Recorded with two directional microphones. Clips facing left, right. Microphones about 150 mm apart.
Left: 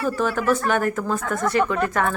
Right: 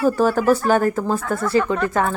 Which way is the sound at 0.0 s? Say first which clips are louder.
Right 5 dB; 35° right (ahead or behind).